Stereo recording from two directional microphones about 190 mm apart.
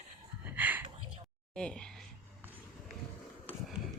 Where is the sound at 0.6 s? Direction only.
10° right (ahead or behind).